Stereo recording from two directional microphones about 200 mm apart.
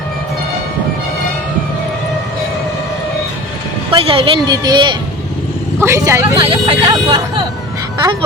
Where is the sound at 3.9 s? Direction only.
30° right (ahead or behind).